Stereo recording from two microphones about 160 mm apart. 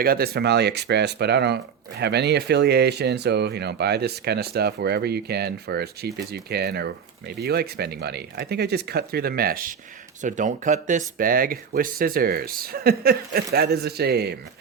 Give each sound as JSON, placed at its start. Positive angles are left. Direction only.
{"t": 0.0, "sound": "speech", "side_deg": -70}
{"t": 10.2, "sound": "speech", "side_deg": -50}